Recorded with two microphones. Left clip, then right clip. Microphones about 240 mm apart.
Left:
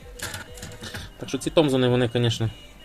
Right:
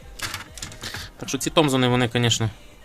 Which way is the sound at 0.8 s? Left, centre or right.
Right.